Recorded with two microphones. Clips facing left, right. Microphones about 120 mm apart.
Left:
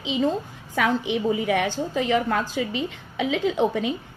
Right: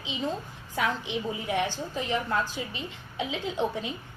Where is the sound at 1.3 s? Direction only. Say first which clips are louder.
Left 6 dB; 75° left (ahead or behind).